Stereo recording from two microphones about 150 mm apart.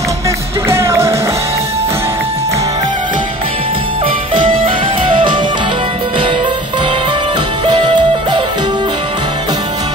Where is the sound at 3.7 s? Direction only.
35° right (ahead or behind).